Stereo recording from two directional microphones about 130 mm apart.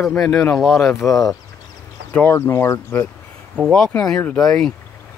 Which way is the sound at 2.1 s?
20° left (ahead or behind).